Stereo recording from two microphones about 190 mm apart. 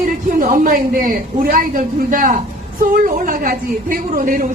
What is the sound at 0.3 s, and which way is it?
A man's voice, 45° right (ahead or behind).